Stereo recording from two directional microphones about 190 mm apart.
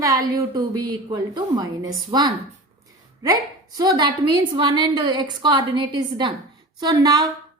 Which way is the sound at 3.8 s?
20° right (ahead or behind).